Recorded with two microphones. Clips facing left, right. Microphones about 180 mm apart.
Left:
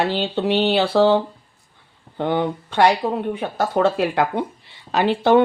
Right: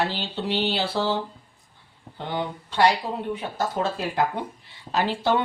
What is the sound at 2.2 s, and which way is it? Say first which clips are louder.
Speech: left 9 dB; 60° left (ahead or behind).